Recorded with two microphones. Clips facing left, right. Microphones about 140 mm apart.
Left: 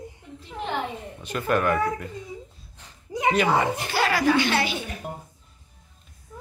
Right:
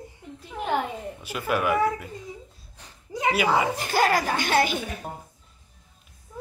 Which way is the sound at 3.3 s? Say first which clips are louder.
Left 1 dB; 5° right (ahead or behind).